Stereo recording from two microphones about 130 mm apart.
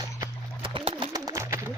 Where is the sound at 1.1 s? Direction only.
25° right (ahead or behind).